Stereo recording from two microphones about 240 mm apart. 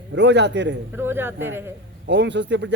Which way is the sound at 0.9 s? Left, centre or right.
Centre.